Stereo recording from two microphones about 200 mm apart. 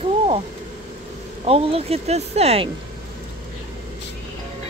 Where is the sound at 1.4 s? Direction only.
30° right (ahead or behind).